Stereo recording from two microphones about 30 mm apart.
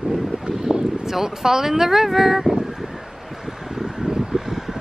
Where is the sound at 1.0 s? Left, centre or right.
Centre.